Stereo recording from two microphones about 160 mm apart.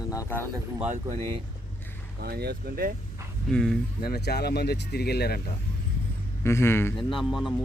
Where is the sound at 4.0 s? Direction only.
70° left (ahead or behind).